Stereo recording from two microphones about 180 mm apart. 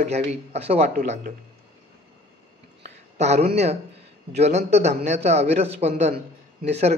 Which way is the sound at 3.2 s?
40° right (ahead or behind).